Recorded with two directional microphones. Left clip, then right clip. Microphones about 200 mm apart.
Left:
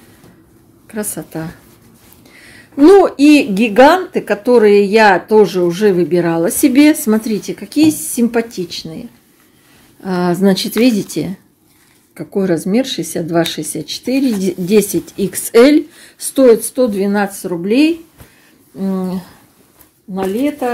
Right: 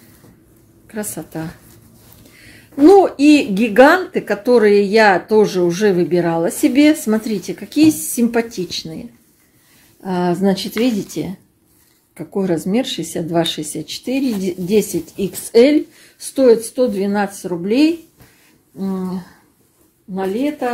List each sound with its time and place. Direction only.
0.8 s a woman's voice: 15° left (ahead or behind)
10.0 s a woman's voice: 20° left (ahead or behind)
12.2 s a woman's voice: 10° left (ahead or behind)